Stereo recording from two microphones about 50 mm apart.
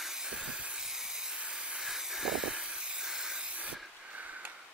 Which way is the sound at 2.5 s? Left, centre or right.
Right.